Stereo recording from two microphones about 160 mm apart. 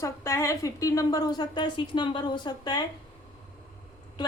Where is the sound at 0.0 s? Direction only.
20° left (ahead or behind).